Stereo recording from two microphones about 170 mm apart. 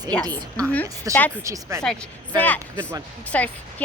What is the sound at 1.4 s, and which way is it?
Speech, 20° right (ahead or behind).